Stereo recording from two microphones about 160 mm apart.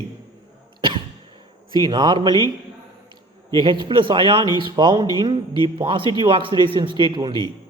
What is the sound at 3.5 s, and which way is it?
Speech, 30° right (ahead or behind).